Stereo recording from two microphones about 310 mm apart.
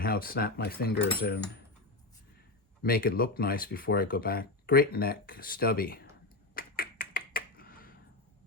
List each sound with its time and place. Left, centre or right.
0.0 s speech: left
2.8 s speech: left
6.5 s finger snapping: left